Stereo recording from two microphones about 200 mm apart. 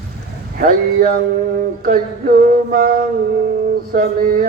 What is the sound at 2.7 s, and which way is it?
Mantra, 45° right (ahead or behind).